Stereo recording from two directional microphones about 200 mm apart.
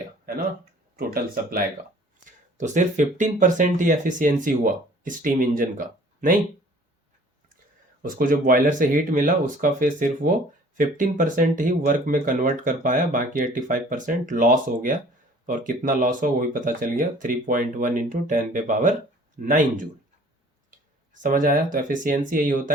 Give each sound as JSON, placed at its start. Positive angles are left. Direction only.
{"t": 0.9, "sound": "speech", "side_deg": -50}
{"t": 2.6, "sound": "speech", "side_deg": -35}
{"t": 8.0, "sound": "speech", "side_deg": -45}
{"t": 21.1, "sound": "speech", "side_deg": -40}